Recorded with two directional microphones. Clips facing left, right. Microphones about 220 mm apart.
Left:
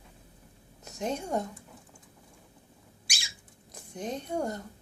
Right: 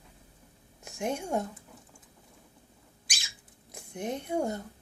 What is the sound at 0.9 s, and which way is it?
Speech, 10° right (ahead or behind).